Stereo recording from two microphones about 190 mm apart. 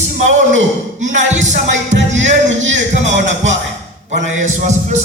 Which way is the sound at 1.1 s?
40° right (ahead or behind).